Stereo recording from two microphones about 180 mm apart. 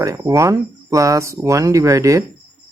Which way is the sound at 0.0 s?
15° right (ahead or behind).